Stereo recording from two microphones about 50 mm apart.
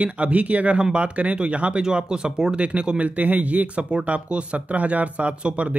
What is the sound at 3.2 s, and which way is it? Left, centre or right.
Speech, right.